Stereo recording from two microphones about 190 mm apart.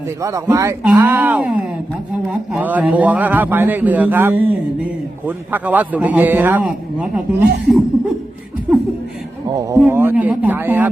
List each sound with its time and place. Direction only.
0.2 s a man's voice: 15° right (ahead or behind)
8.7 s chuckle: 5° right (ahead or behind)
9.5 s a man's voice: 20° right (ahead or behind)